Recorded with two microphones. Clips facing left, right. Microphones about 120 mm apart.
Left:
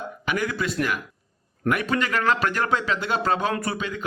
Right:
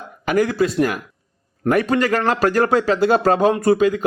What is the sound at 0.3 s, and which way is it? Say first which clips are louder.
A man's voice: right 9 dB; 40° right (ahead or behind).